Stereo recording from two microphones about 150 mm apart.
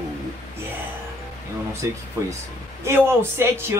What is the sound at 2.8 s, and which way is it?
Speech, 15° right (ahead or behind).